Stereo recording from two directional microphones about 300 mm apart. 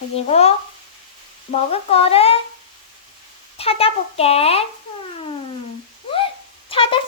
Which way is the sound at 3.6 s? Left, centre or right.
Centre.